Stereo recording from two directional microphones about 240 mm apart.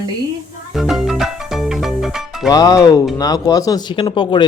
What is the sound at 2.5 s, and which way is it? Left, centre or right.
Speech, centre.